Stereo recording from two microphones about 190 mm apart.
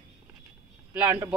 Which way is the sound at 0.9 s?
10° right (ahead or behind).